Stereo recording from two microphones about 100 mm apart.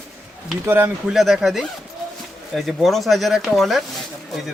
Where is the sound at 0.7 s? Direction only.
20° right (ahead or behind).